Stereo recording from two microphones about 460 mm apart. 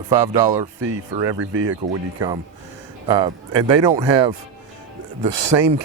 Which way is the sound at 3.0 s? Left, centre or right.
Centre.